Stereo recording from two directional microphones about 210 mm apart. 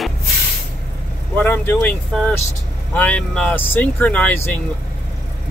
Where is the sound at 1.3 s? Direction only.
10° left (ahead or behind).